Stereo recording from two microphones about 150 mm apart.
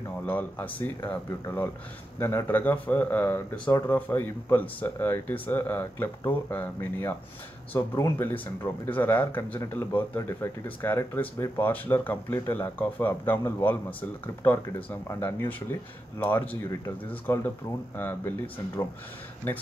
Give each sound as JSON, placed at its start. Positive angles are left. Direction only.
{"t": 0.3, "sound": "speech", "side_deg": 10}